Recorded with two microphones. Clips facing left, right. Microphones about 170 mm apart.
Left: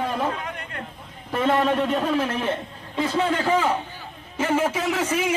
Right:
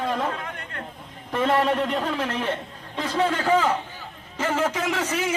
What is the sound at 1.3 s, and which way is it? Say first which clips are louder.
A man's voice: left 1 dB; centre (ahead or behind).